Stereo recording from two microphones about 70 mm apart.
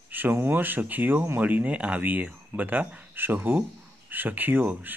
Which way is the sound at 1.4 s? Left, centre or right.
Right.